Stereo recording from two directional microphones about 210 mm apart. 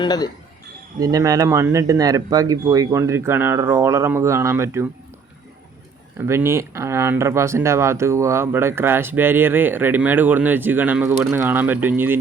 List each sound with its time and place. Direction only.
0.0 s speech: 20° left (ahead or behind)
0.9 s speech: 15° right (ahead or behind)
6.1 s speech: 10° right (ahead or behind)